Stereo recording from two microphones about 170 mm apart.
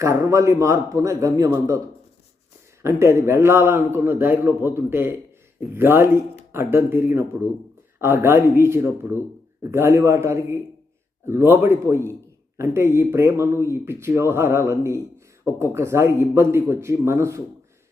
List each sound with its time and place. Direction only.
0.0 s a man's voice: 20° right (ahead or behind)
2.8 s speech: 15° right (ahead or behind)